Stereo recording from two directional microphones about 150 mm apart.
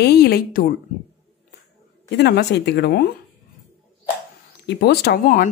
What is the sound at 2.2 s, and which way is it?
Speech, 90° left.